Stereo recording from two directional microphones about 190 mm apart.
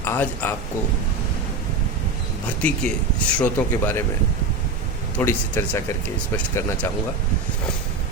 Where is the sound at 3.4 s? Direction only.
10° left (ahead or behind).